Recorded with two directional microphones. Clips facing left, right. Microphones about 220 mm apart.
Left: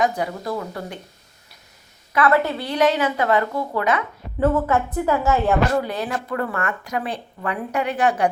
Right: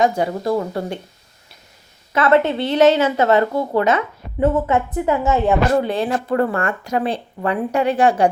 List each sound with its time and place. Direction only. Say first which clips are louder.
0.0 s speech: right 5 dB; 25° right (ahead or behind)
2.1 s speech: right 3 dB; 25° right (ahead or behind)